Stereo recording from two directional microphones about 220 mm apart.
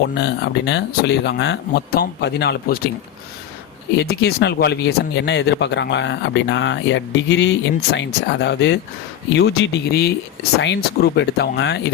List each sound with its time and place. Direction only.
0.0 s speech: 50° left (ahead or behind)
3.9 s speech: 45° left (ahead or behind)